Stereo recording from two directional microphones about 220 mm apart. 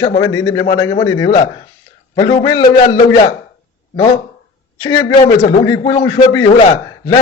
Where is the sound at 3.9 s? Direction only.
15° left (ahead or behind).